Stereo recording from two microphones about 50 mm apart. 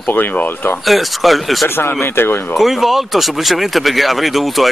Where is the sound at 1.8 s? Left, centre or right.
Left.